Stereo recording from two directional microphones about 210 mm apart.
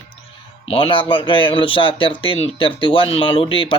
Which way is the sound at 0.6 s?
25° left (ahead or behind).